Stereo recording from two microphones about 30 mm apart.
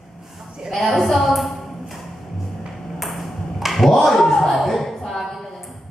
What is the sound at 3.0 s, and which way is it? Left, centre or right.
Ping, centre.